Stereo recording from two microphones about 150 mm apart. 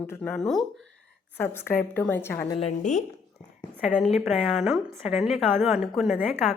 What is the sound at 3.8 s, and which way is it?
A woman's voice, centre (ahead or behind).